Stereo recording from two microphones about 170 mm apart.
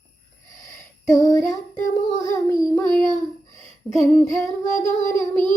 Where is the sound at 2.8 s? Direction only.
25° right (ahead or behind).